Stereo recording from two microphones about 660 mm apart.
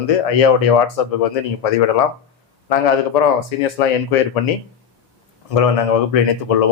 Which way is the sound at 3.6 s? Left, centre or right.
Left.